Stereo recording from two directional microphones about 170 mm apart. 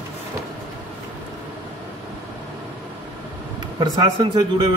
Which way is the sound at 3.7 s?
25° right (ahead or behind).